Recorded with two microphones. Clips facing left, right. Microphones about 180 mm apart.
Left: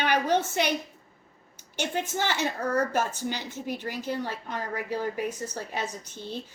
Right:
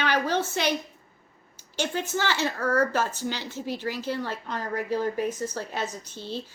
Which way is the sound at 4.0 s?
15° left (ahead or behind).